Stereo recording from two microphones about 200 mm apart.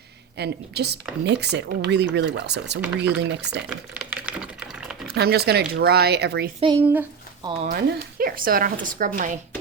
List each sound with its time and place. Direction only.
0.3 s speech: 55° right (ahead or behind)
2.8 s speech: 5° right (ahead or behind)
3.2 s speech: 55° right (ahead or behind)
3.9 s typing: 5° right (ahead or behind)
5.1 s speech: 55° right (ahead or behind)
6.6 s speech: 25° right (ahead or behind)
7.7 s speech: 50° right (ahead or behind)